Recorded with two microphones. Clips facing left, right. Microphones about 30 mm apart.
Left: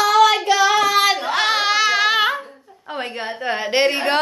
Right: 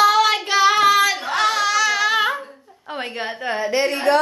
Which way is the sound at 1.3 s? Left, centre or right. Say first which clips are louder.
Left 1 dB; left.